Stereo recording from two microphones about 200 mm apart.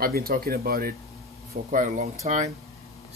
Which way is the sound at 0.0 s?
50° right (ahead or behind).